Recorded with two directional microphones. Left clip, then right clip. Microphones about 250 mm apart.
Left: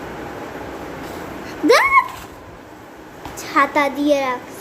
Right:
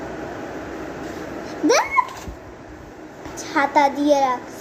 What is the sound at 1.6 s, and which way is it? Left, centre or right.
Dog, centre.